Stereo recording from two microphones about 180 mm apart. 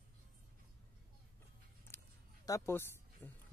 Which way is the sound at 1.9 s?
15° left (ahead or behind).